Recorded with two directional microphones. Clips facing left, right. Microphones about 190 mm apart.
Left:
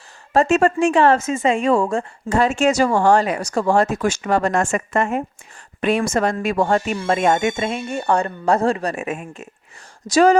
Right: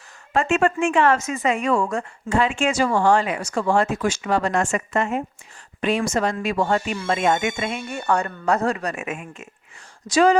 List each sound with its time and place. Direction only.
0.3 s a woman's voice: 40° left (ahead or behind)